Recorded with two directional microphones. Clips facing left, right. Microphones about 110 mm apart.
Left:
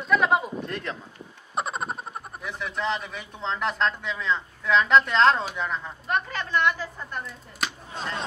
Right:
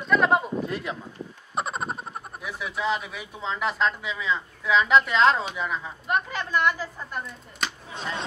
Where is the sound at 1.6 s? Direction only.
Centre (ahead or behind).